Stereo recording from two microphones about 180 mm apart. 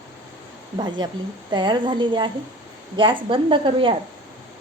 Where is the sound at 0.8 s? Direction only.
25° right (ahead or behind).